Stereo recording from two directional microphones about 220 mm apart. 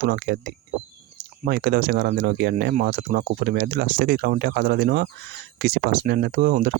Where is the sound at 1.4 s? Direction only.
45° right (ahead or behind).